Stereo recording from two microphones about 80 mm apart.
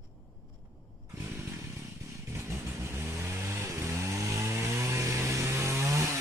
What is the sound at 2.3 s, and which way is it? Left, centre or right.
Vehicle, right.